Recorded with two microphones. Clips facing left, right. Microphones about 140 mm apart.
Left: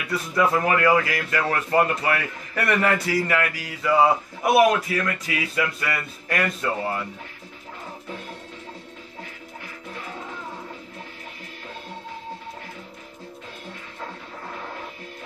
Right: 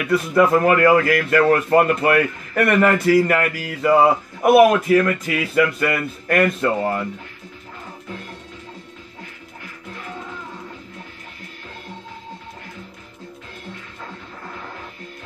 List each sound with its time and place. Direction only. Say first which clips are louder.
0.1 s speech: right 6 dB; 55° right (ahead or behind)